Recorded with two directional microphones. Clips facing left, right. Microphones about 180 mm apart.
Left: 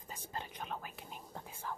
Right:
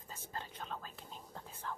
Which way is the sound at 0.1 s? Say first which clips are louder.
Left 2 dB; 15° left (ahead or behind).